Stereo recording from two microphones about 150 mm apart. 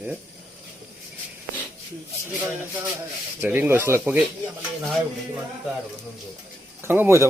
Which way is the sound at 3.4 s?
15° right (ahead or behind).